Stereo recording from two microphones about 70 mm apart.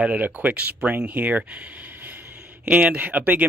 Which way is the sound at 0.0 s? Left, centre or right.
Centre.